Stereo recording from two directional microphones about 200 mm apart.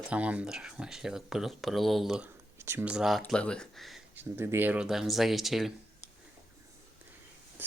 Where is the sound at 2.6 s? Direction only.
10° right (ahead or behind).